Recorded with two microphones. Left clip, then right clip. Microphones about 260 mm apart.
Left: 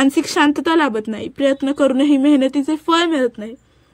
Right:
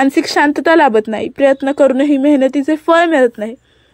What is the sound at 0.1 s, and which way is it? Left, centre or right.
A woman's voice, centre.